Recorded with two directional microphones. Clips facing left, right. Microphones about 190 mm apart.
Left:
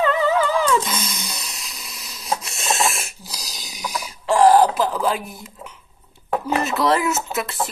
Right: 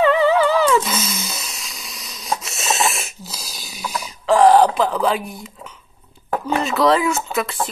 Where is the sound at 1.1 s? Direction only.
Centre (ahead or behind).